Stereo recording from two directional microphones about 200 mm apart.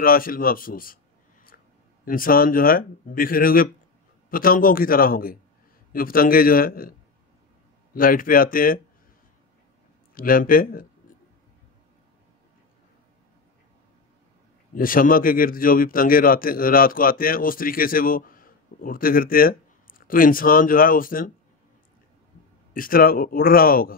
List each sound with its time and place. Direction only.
0.0 s a man's voice: 45° left (ahead or behind)
2.0 s a man's voice: 45° left (ahead or behind)
10.1 s a man's voice: 45° left (ahead or behind)
14.7 s a man's voice: 45° left (ahead or behind)
22.8 s a man's voice: 45° left (ahead or behind)